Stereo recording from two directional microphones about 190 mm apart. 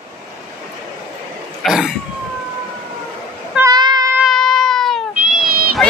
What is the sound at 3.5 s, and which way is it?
Meow, 20° right (ahead or behind).